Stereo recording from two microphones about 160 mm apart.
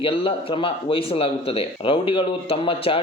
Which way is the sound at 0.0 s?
35° left (ahead or behind).